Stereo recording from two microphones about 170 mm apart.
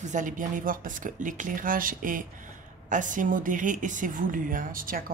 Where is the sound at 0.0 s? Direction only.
50° right (ahead or behind).